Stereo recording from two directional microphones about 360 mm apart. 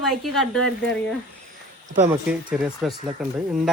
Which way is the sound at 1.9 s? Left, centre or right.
Right.